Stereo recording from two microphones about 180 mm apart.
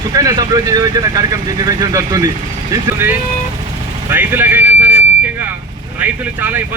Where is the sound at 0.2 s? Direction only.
20° right (ahead or behind).